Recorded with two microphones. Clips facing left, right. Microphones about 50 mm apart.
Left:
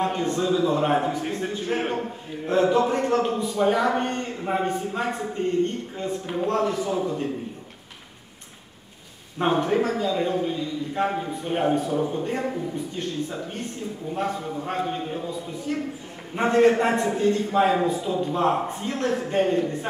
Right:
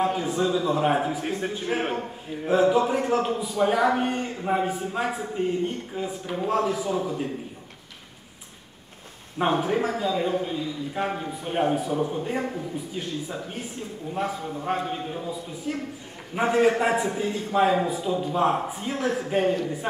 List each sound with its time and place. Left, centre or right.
0.0 s a man's voice: centre
9.4 s a man's voice: centre
15.7 s a woman's voice: centre
17.5 s a man's voice: centre